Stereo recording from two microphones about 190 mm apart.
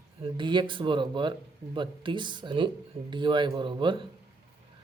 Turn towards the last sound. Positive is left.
turn(degrees=-25)  # may be behind; listen again after turning